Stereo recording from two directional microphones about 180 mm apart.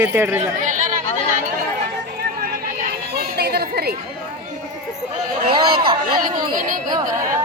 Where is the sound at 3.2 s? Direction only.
60° right (ahead or behind).